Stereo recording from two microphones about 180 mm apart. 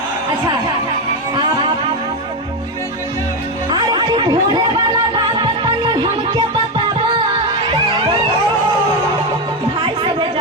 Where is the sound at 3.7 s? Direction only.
25° right (ahead or behind).